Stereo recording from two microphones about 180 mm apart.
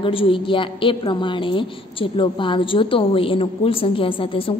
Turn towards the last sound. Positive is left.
turn(degrees=30)  # may be behind; listen again after turning